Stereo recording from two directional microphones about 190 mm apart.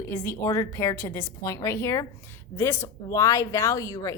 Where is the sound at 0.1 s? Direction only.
15° left (ahead or behind).